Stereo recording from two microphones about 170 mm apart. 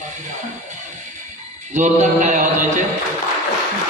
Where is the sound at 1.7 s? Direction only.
45° right (ahead or behind).